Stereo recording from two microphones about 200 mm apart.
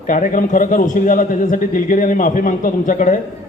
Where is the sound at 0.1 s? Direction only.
40° left (ahead or behind).